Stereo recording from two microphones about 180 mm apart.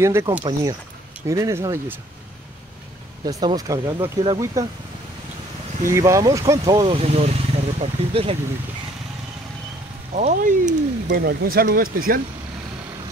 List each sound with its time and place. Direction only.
0.0 s speech: 15° right (ahead or behind)
0.4 s speech: 25° right (ahead or behind)
3.3 s speech: 20° right (ahead or behind)
5.9 s speech: 15° right (ahead or behind)
6.9 s speech: 35° right (ahead or behind)
10.1 s speech: 45° right (ahead or behind)
11.1 s speech: 60° right (ahead or behind)